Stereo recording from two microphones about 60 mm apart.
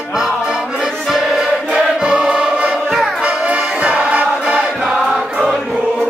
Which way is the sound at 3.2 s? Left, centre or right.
Centre.